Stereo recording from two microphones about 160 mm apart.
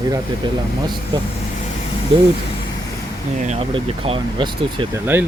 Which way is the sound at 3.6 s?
35° right (ahead or behind).